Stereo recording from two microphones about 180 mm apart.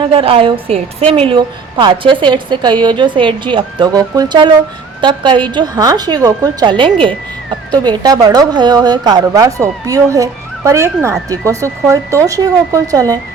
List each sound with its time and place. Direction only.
0.0 s a woman's voice: 30° right (ahead or behind)